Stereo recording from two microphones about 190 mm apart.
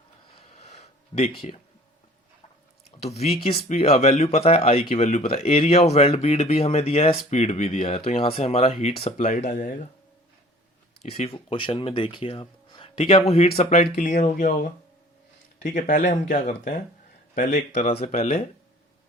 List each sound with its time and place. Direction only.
0.3 s a sound: 35° left (ahead or behind)
1.1 s speech: 35° left (ahead or behind)
3.0 s speech: 35° left (ahead or behind)
11.0 s speech: 35° left (ahead or behind)